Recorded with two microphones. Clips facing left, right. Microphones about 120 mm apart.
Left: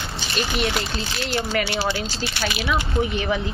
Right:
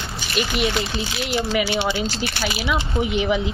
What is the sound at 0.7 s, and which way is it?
Speech, 5° right (ahead or behind).